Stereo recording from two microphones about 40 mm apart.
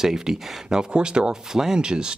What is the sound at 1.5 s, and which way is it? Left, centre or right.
Speech, centre.